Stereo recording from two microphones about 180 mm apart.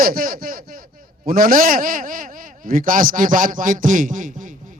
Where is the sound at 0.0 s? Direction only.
50° right (ahead or behind).